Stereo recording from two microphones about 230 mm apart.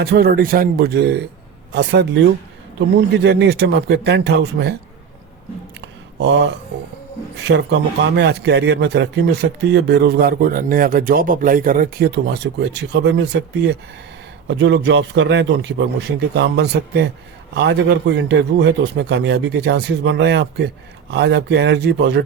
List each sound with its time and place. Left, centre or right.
0.0 s speech: right
3.2 s speech: right
6.1 s speech: right